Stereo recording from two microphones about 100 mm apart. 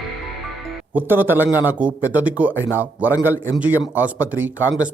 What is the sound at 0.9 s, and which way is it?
A man's voice, 20° right (ahead or behind).